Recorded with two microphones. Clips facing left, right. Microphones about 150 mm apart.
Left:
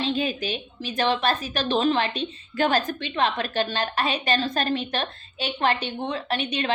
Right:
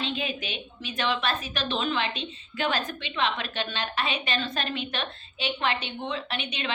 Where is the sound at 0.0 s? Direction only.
35° left (ahead or behind).